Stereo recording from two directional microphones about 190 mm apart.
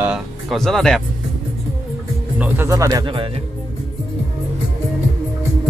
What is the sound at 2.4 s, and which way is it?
Speech, 15° right (ahead or behind).